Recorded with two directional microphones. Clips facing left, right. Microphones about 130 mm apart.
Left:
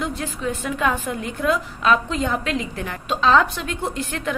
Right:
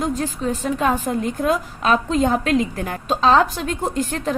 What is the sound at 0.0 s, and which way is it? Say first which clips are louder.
A woman's voice: right 4 dB; 40° right (ahead or behind).